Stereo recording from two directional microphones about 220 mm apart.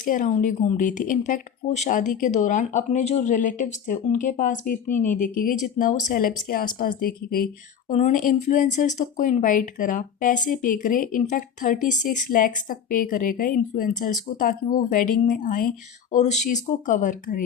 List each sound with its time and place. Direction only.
0.0 s speech: 35° left (ahead or behind)